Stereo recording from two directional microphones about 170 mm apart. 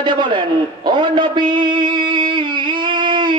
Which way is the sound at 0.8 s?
25° right (ahead or behind).